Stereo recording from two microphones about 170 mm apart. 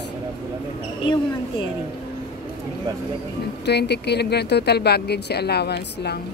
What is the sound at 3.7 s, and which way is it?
Speech, 75° left (ahead or behind).